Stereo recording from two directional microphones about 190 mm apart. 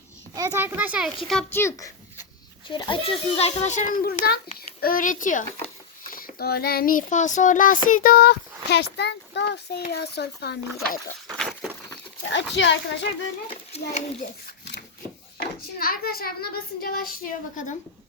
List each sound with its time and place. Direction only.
0.3 s a child's voice: 15° right (ahead or behind); by 10.6 s 60° left (ahead or behind)
11.3 s a sound: centre (ahead or behind)
12.3 s a child's voice: 70° left (ahead or behind)
13.5 s a child's voice: 35° left (ahead or behind)
15.8 s speech: 50° left (ahead or behind)